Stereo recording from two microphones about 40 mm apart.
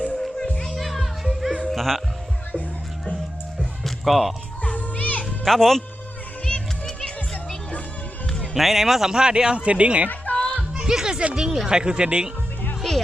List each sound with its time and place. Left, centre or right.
0.2 s music: left
0.6 s children playing: centre
1.6 s music: centre
3.8 s music: centre
4.6 s music: left
5.2 s music: centre
6.4 s children playing: centre
8.5 s a man's voice: centre; by 10.1 s right
10.3 s music: left
10.8 s music: centre
11.3 s speech: centre